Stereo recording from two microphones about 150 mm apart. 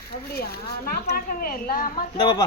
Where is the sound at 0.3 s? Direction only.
90° left.